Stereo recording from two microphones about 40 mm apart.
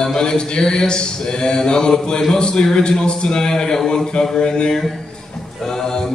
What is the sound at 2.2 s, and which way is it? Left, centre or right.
A man's voice, left.